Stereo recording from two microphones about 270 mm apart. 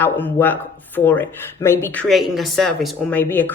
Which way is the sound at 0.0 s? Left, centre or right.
Centre.